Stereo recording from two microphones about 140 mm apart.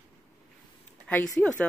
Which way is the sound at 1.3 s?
5° left (ahead or behind).